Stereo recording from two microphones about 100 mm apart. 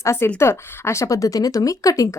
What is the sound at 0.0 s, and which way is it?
A woman's voice, 25° left (ahead or behind).